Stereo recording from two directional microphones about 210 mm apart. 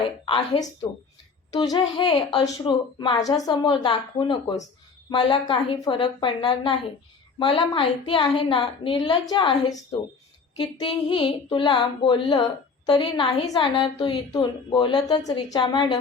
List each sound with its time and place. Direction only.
0.3 s female singing: 25° left (ahead or behind)